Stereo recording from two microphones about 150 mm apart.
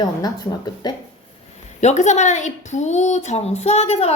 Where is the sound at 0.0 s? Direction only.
25° left (ahead or behind).